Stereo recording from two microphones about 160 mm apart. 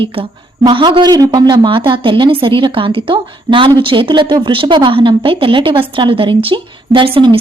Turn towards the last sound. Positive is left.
turn(degrees=-30)  # may be behind; listen again after turning